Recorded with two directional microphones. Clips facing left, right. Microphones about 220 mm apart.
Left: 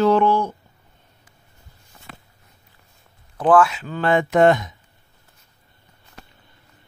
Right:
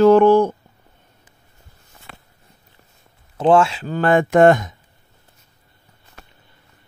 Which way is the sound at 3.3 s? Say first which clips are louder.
Right 1 dB; 25° right (ahead or behind).